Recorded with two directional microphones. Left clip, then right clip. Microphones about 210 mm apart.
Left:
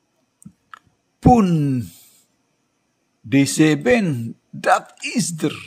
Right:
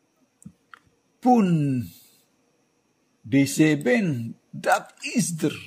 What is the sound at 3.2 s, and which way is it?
Speech, 25° left (ahead or behind).